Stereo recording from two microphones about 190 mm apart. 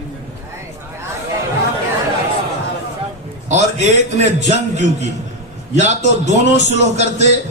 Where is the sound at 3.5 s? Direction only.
35° right (ahead or behind).